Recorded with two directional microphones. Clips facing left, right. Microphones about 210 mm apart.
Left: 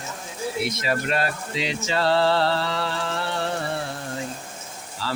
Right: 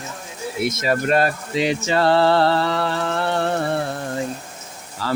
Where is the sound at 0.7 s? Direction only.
45° right (ahead or behind).